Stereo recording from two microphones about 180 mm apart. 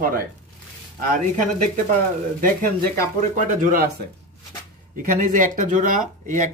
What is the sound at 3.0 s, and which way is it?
Speech, 50° right (ahead or behind).